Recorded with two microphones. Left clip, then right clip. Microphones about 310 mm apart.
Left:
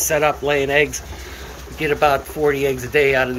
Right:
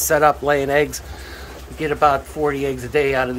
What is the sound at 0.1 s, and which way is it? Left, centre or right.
Speech, centre.